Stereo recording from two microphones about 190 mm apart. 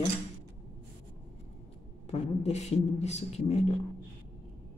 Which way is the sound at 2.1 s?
35° left (ahead or behind).